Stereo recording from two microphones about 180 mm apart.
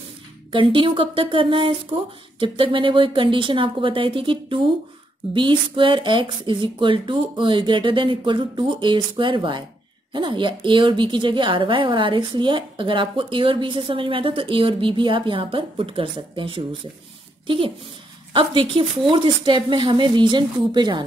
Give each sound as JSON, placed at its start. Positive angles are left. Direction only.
{"t": 0.5, "sound": "a woman's voice", "side_deg": -30}